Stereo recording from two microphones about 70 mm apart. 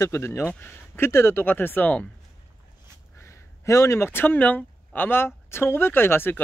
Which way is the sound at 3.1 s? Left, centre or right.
Left.